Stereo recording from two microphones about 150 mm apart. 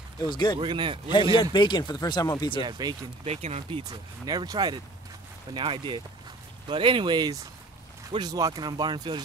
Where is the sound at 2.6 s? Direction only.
30° right (ahead or behind).